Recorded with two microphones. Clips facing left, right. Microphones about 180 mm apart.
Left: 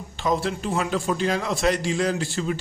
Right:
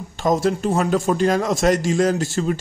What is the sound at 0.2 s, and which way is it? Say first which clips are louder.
Speech: right 6 dB; 45° right (ahead or behind).